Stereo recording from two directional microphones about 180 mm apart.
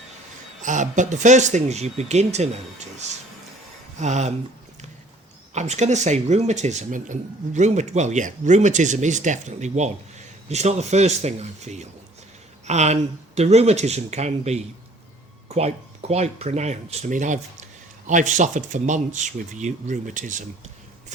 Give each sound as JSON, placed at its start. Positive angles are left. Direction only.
{"t": 0.6, "sound": "speech", "side_deg": -45}
{"t": 5.5, "sound": "speech", "side_deg": -40}